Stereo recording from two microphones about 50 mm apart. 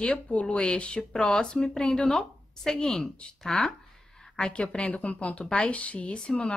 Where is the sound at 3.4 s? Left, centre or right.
Centre.